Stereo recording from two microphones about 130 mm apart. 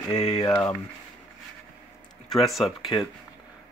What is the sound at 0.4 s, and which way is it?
Speech, 20° left (ahead or behind).